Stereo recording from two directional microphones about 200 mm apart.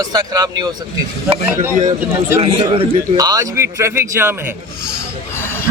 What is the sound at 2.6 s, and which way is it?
A man's voice, 15° right (ahead or behind).